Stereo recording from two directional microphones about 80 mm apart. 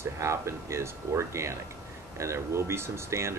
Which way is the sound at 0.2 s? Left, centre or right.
Right.